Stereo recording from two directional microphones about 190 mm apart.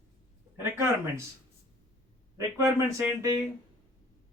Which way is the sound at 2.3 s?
15° right (ahead or behind).